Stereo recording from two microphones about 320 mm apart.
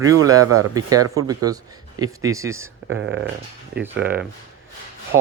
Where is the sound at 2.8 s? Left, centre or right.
Right.